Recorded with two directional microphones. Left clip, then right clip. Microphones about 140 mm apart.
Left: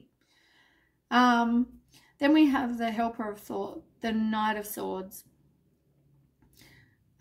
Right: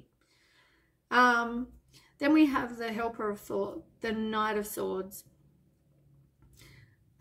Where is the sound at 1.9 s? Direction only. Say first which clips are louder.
Left 1 dB; 40° left (ahead or behind).